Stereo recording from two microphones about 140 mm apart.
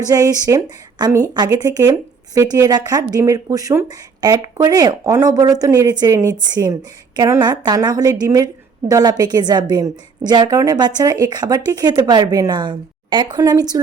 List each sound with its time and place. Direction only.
0.0 s speech: 25° right (ahead or behind)